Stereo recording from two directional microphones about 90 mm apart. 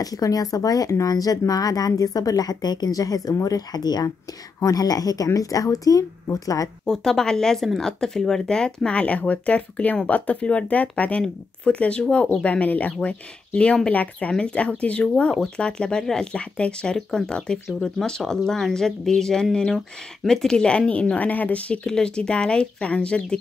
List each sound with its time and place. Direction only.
0.0 s speech: 40° left (ahead or behind)
6.9 s a woman's voice: 5° left (ahead or behind)